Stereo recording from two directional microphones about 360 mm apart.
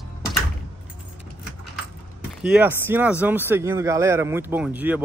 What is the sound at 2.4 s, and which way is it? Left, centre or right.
Speech, centre.